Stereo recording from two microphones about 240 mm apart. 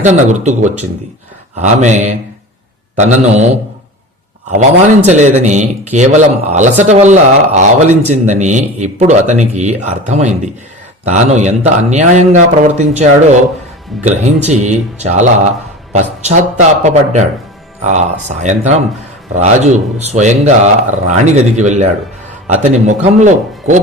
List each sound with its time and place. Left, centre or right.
0.0 s a man's voice: right
5.0 s a man's voice: right